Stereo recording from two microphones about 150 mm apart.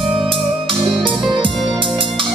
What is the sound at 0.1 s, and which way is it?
Music, 35° right (ahead or behind).